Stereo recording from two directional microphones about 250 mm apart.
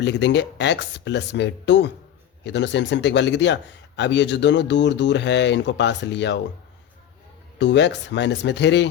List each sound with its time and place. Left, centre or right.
0.0 s a man's voice: left
7.6 s a man's voice: left